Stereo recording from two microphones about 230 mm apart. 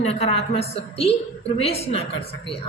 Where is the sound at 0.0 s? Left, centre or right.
Left.